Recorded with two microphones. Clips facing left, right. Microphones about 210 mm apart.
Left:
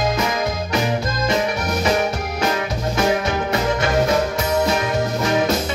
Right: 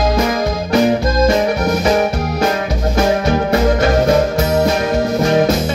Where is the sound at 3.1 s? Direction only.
35° right (ahead or behind).